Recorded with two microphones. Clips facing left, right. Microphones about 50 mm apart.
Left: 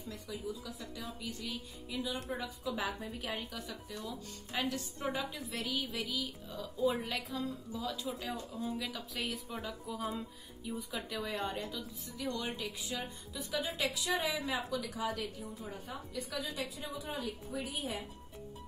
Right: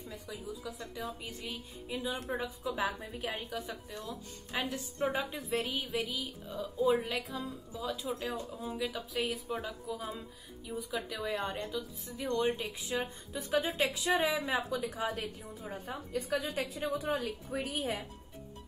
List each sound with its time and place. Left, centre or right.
0.1 s a woman's voice: centre
1.2 s a woman's voice: right
2.6 s a woman's voice: centre
3.9 s speech: centre
4.6 s a woman's voice: centre
5.1 s a woman's voice: right
5.9 s a woman's voice: centre
7.0 s a woman's voice: centre
12.4 s a woman's voice: right